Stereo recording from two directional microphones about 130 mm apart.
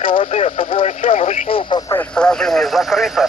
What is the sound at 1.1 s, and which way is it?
Speech, 60° left (ahead or behind).